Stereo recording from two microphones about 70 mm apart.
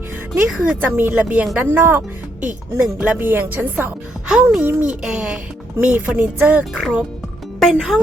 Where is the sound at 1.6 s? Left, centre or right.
Right.